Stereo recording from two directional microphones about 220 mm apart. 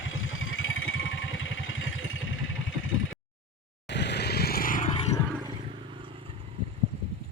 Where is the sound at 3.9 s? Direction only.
50° left (ahead or behind).